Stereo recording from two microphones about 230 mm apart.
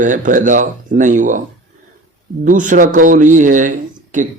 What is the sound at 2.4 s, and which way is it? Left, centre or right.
A man's voice, right.